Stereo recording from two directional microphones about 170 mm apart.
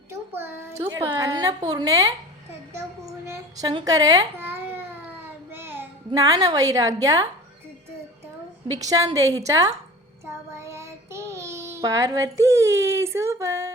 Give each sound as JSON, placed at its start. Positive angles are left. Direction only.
{"t": 0.1, "sound": "a child's voice", "side_deg": -15}
{"t": 3.2, "sound": "a sound", "side_deg": -15}
{"t": 3.7, "sound": "babbling", "side_deg": -25}
{"t": 5.5, "sound": "a sound", "side_deg": -15}
{"t": 6.1, "sound": "a woman's voice", "side_deg": -20}
{"t": 8.6, "sound": "a woman's voice", "side_deg": -20}
{"t": 10.2, "sound": "child singing", "side_deg": -15}